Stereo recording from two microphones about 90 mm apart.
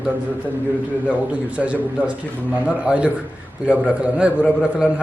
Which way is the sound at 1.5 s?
15° right (ahead or behind).